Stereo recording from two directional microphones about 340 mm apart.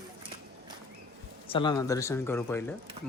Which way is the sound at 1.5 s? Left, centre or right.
Centre.